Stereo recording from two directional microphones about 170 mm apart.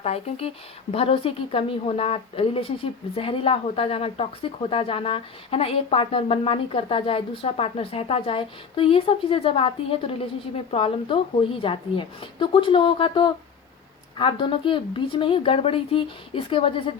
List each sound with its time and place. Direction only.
0.0 s speech: 35° left (ahead or behind)